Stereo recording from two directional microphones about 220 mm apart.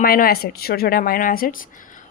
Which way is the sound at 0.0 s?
45° left (ahead or behind).